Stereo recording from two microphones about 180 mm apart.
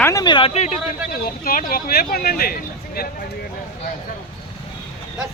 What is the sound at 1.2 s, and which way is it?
Speech, 55° left (ahead or behind).